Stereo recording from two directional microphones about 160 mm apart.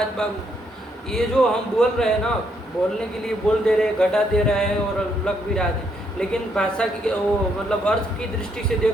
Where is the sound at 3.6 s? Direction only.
5° left (ahead or behind).